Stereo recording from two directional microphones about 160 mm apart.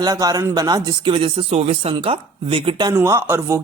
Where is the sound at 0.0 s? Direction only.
25° right (ahead or behind).